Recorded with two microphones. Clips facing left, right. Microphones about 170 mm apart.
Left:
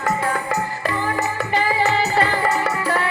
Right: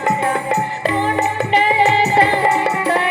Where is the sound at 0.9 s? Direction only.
20° right (ahead or behind).